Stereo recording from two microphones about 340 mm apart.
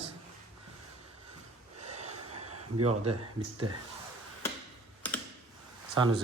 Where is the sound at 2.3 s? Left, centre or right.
Right.